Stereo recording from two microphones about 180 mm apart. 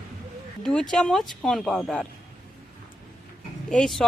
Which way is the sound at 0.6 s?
5° left (ahead or behind).